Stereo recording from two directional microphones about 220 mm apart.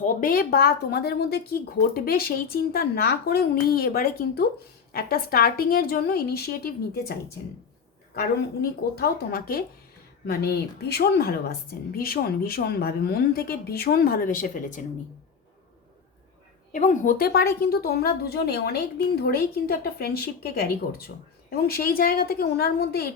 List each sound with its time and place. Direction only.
0.0 s speech: 40° left (ahead or behind)
9.0 s speech: 45° left (ahead or behind)
16.7 s speech: 35° left (ahead or behind)